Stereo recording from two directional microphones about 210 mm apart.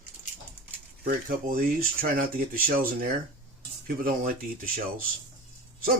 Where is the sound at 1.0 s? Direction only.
40° right (ahead or behind).